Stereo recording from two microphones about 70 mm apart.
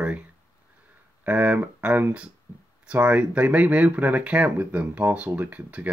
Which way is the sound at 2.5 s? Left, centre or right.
Left.